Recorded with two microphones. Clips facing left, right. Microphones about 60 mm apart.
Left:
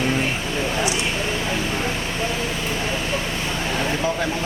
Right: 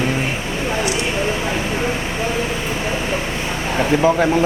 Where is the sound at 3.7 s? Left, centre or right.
Right.